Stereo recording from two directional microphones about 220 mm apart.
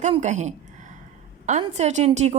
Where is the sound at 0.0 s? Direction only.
35° right (ahead or behind).